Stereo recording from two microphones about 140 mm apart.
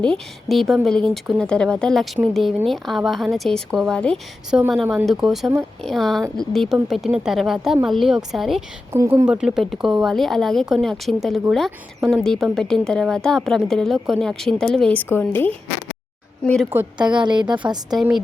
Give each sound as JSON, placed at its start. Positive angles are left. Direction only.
{"t": 0.0, "sound": "a woman's voice", "side_deg": 5}
{"t": 8.9, "sound": "speech", "side_deg": -15}
{"t": 9.3, "sound": "a woman's voice", "side_deg": -5}
{"t": 17.0, "sound": "speech", "side_deg": -35}
{"t": 17.6, "sound": "a woman's voice", "side_deg": -20}